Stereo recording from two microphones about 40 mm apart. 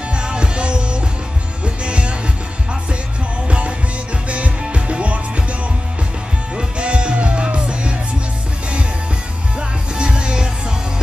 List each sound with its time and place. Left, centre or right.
0.1 s music: right
3.4 s music: right
6.8 s music: right
9.6 s music: right